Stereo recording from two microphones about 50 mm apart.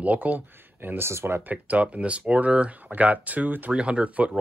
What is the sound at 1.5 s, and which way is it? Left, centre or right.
Speech, right.